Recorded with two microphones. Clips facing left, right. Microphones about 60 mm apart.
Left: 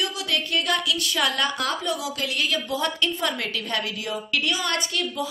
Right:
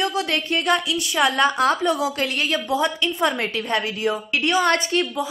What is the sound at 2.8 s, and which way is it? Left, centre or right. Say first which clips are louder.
A woman's voice: right 4 dB; right.